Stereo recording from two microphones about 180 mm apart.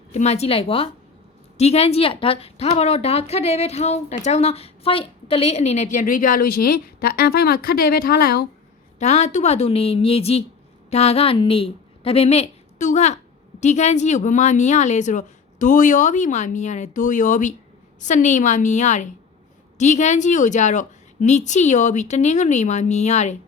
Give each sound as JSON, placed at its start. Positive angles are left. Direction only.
{"t": 0.1, "sound": "a woman's voice", "side_deg": 40}
{"t": 9.0, "sound": "a woman's voice", "side_deg": 40}